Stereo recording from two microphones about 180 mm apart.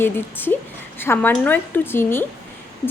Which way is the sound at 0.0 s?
10° left (ahead or behind).